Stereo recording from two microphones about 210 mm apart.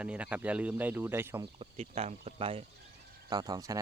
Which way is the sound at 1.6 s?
30° right (ahead or behind).